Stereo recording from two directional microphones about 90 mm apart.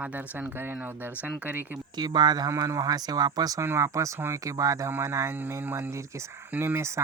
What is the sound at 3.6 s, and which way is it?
Speech, 30° right (ahead or behind).